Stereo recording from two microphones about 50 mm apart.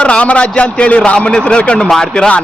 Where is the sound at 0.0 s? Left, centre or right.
Left.